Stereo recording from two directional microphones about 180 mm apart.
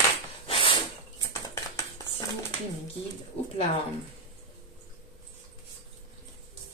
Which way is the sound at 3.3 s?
35° left (ahead or behind).